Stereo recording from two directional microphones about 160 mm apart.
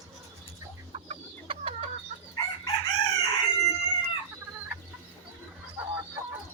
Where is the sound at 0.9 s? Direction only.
35° right (ahead or behind).